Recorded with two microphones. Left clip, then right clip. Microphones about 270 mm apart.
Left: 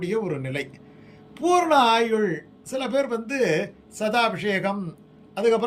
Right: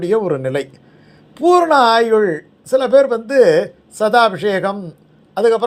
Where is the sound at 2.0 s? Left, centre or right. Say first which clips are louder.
Right 9 dB; right.